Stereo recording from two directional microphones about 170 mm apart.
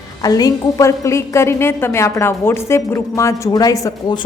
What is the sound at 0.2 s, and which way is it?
Speech, 20° left (ahead or behind).